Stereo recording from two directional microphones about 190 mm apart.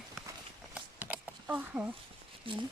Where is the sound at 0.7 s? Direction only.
5° right (ahead or behind).